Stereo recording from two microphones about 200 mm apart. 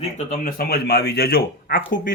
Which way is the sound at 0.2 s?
35° left (ahead or behind).